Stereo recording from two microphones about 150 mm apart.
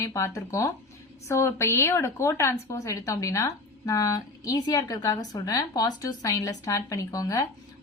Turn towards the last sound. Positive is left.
turn(degrees=25)  # may be behind; listen again after turning